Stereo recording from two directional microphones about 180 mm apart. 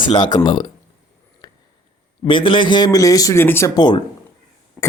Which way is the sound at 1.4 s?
25° left (ahead or behind).